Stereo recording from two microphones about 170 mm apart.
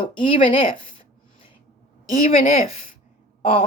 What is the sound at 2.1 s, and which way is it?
Speech, 45° left (ahead or behind).